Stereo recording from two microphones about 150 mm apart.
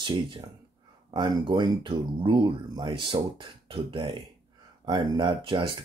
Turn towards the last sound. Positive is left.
turn(degrees=-35)  # may be behind; listen again after turning